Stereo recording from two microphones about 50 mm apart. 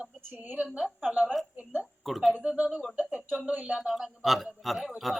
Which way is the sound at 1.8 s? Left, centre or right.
Centre.